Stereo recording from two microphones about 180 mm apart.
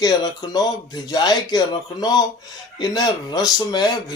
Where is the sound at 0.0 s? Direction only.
20° left (ahead or behind).